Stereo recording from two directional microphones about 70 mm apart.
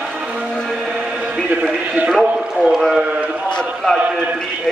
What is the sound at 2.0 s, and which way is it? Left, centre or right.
Speech, centre.